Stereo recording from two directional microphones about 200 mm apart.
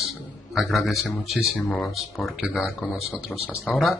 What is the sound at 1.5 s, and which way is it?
Speech, 10° left (ahead or behind).